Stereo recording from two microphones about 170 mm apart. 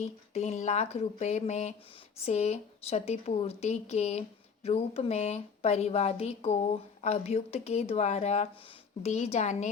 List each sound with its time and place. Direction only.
0.0 s a woman's voice: 40° left (ahead or behind)